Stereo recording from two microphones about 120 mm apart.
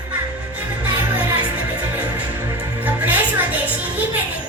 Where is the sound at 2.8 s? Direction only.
10° right (ahead or behind).